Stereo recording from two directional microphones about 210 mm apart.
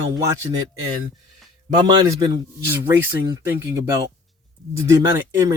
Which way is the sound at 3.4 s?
15° right (ahead or behind).